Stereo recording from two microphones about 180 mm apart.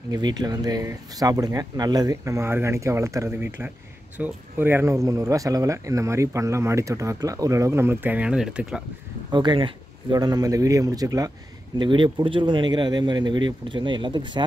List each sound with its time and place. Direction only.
0.1 s speech: 20° right (ahead or behind); by 8.8 s 5° right (ahead or behind)
9.3 s speech: 25° right (ahead or behind)